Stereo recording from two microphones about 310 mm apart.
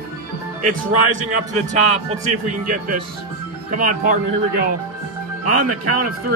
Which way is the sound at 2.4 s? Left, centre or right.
Right.